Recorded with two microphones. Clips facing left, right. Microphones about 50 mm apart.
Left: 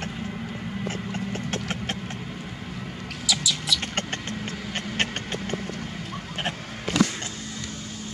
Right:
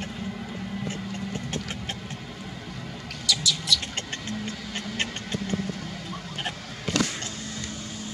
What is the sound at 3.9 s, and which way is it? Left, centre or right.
Vehicle, left.